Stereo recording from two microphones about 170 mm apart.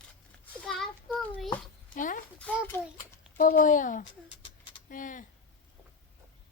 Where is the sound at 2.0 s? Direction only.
50° left (ahead or behind).